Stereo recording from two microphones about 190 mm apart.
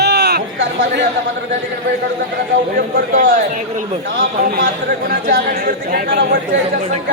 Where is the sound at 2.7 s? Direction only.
45° right (ahead or behind).